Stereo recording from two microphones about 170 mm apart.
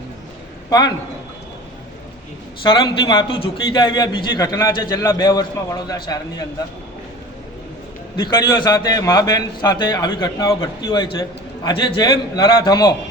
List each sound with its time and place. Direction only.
0.7 s a man's voice: 20° left (ahead or behind)
2.6 s a man's voice: 25° left (ahead or behind)
8.1 s a man's voice: 25° left (ahead or behind)